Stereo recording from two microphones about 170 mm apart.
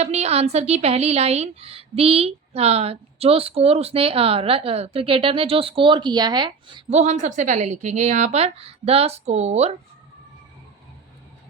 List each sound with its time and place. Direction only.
0.0 s a woman's voice: 40° right (ahead or behind)
6.9 s a woman's voice: 40° right (ahead or behind)